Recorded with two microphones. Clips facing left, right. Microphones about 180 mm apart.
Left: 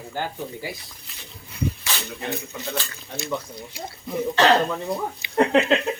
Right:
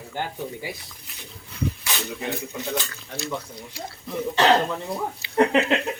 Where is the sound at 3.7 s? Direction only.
15° left (ahead or behind).